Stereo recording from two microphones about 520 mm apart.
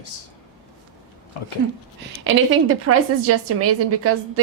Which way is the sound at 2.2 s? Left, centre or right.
Right.